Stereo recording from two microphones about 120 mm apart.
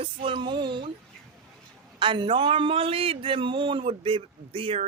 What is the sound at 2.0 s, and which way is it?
A man's voice, 45° right (ahead or behind).